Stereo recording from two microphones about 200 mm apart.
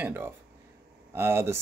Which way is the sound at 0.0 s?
10° right (ahead or behind).